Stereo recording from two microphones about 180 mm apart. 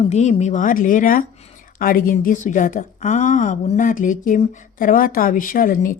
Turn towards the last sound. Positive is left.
turn(degrees=50)  # may be behind; listen again after turning